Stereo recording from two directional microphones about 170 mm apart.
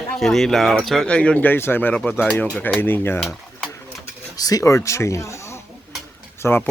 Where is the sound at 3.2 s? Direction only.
Centre (ahead or behind).